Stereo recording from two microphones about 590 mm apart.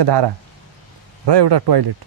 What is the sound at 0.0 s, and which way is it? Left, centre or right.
Speech, right.